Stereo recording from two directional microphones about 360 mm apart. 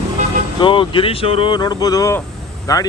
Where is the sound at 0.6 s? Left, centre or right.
Centre.